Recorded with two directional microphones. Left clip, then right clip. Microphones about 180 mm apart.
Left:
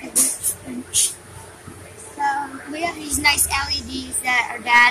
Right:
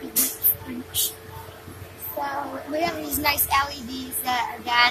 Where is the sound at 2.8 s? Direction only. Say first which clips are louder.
Left 5 dB; 10° left (ahead or behind).